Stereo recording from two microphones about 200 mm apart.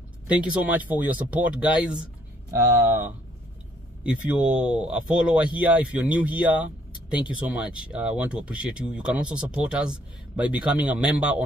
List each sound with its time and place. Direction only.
0.3 s speech: 5° right (ahead or behind)
4.0 s speech: 5° right (ahead or behind)